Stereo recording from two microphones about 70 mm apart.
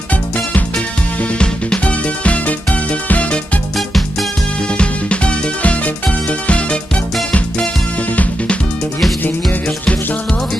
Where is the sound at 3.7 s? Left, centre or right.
Centre.